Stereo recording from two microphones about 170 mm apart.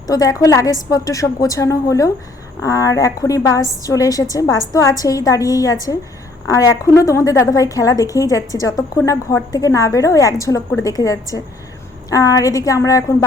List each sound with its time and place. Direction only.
0.1 s a woman's voice: 20° left (ahead or behind)